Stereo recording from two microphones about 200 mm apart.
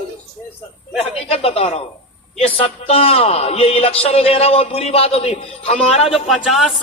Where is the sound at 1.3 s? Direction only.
30° left (ahead or behind).